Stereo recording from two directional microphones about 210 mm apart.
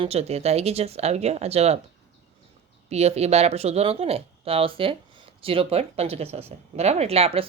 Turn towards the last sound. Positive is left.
turn(degrees=-25)  # may be behind; listen again after turning